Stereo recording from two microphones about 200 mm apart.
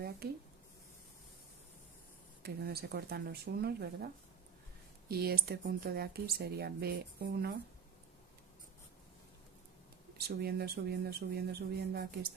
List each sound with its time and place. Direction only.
2.4 s speech: 50° right (ahead or behind)
10.2 s speech: 50° right (ahead or behind)